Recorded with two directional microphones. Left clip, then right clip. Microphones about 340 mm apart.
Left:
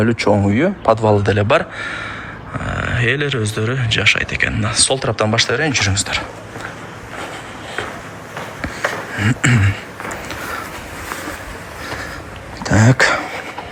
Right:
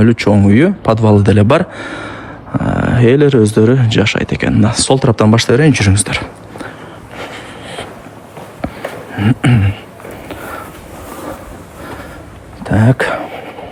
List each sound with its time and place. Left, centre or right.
0.0 s speech: right
9.1 s a sound: centre
12.6 s throat clearing: centre